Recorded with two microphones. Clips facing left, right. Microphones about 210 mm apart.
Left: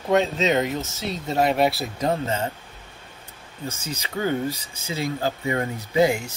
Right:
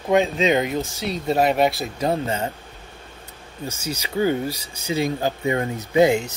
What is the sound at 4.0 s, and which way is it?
Speech, 10° right (ahead or behind).